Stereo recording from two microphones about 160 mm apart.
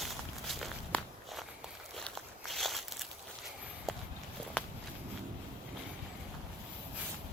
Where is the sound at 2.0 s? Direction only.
Centre (ahead or behind).